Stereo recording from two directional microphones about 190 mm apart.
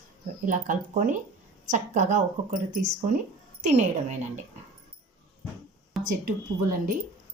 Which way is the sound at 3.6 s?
40° right (ahead or behind).